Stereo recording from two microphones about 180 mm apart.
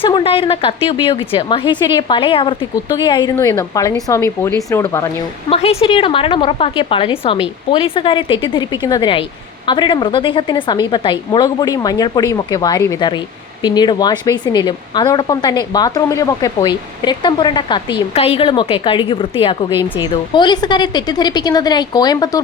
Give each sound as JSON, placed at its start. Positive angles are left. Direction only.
{"t": 0.0, "sound": "a woman's voice", "side_deg": 30}
{"t": 5.5, "sound": "a woman's voice", "side_deg": 30}